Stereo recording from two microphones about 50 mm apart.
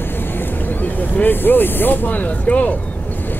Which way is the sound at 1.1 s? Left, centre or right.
Left.